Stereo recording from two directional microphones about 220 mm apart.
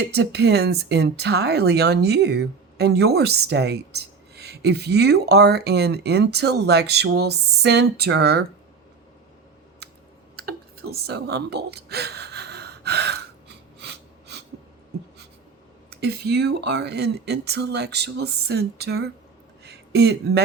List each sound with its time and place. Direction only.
0.1 s speech: 50° right (ahead or behind)
10.3 s gasp: 45° right (ahead or behind)
15.9 s speech: 50° right (ahead or behind)
19.6 s a sound: 50° right (ahead or behind)